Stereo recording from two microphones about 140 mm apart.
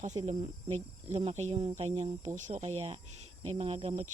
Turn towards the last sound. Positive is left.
turn(degrees=-50)  # may be behind; listen again after turning